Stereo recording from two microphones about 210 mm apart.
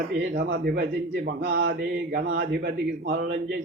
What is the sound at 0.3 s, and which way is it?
Speech, 45° right (ahead or behind).